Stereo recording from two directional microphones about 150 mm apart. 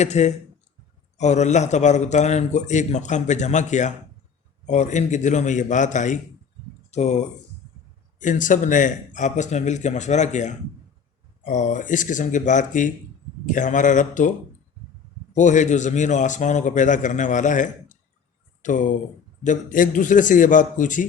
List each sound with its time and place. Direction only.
0.0 s a man's voice: 50° left (ahead or behind)
15.4 s a man's voice: 55° left (ahead or behind)